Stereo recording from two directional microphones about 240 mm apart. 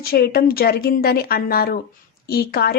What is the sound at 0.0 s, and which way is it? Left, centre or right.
Speech, left.